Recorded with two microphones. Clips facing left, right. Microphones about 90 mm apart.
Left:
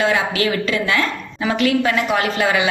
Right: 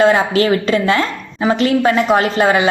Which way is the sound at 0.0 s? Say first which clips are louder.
Right 6 dB; 40° right (ahead or behind).